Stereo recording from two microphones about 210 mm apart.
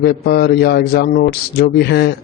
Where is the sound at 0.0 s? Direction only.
50° left (ahead or behind).